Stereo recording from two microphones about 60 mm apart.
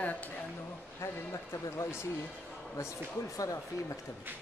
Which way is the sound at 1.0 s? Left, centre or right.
Left.